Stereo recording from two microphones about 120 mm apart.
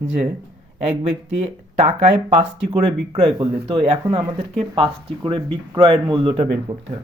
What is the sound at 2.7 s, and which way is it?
Speech, 45° right (ahead or behind).